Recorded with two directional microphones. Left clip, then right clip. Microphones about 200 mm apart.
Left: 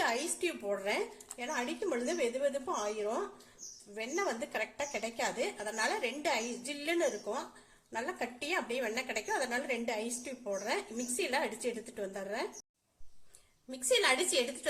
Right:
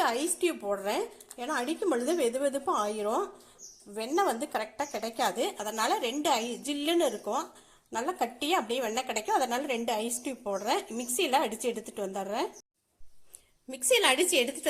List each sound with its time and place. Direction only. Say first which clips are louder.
0.0 s a woman's voice: right 5 dB; 20° right (ahead or behind)
4.3 s a woman's voice: right 5 dB; centre (ahead or behind)
5.1 s a woman's voice: right 9 dB; 25° right (ahead or behind)
13.7 s a woman's voice: right 4 dB; 30° right (ahead or behind)